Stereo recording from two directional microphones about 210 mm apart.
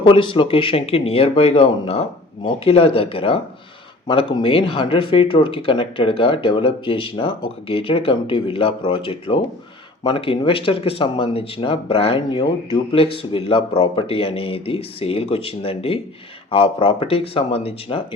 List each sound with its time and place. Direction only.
0.0 s speech: 20° left (ahead or behind)